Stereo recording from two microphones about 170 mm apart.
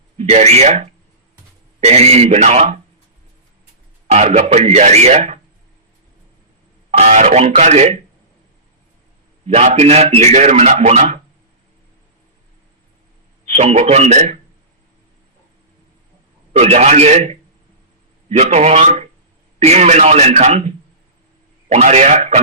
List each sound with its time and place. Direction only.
0.2 s a man's voice: 40° right (ahead or behind)
4.1 s a man's voice: 40° right (ahead or behind)
6.9 s a man's voice: 45° right (ahead or behind)
9.5 s a man's voice: 40° right (ahead or behind)
13.5 s a man's voice: 40° right (ahead or behind)
16.5 s a man's voice: 40° right (ahead or behind)